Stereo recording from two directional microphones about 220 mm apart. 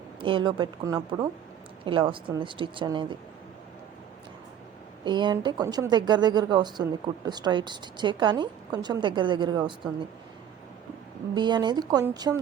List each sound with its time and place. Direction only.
0.2 s a woman's voice: 25° right (ahead or behind)
5.0 s a woman's voice: 20° right (ahead or behind)
11.3 s a woman's voice: 20° right (ahead or behind)